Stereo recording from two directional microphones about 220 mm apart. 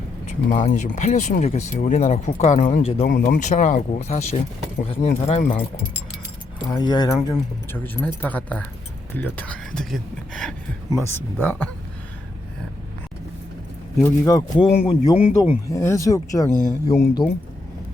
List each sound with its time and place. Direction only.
0.6 s speech: 30° left (ahead or behind)
6.7 s speech: 20° left (ahead or behind)
14.0 s a man's voice: 15° left (ahead or behind)
15.7 s speech: 15° left (ahead or behind)